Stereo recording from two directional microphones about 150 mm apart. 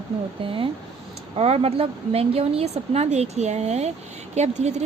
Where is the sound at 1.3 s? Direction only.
40° right (ahead or behind).